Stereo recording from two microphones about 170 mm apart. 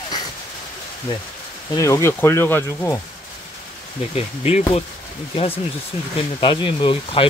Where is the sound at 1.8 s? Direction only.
20° left (ahead or behind).